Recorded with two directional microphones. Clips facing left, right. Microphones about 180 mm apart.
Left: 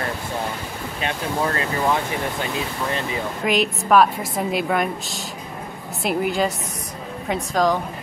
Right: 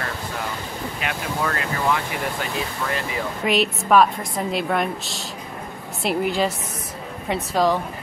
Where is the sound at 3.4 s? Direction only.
Centre (ahead or behind).